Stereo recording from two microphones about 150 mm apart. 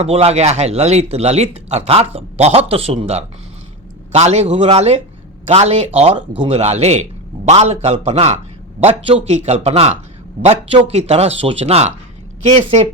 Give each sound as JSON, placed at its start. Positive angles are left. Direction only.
{"t": 0.0, "sound": "a man's voice", "side_deg": -45}